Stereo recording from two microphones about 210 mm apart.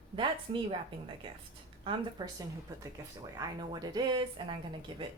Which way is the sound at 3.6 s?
20° right (ahead or behind).